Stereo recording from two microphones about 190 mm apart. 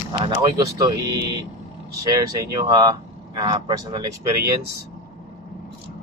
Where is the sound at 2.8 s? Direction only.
20° right (ahead or behind).